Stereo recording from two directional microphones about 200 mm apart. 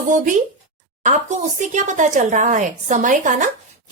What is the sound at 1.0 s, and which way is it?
Speech, 35° right (ahead or behind).